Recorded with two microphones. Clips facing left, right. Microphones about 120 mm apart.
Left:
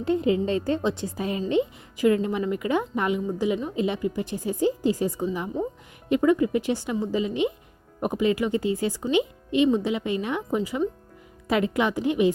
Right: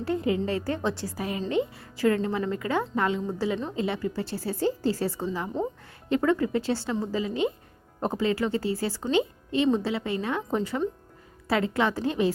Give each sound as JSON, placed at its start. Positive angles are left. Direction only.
{"t": 0.0, "sound": "a woman's voice", "side_deg": 20}